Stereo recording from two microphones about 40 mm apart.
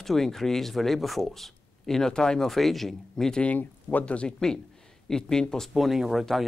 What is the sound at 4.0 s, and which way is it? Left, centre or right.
Speech, left.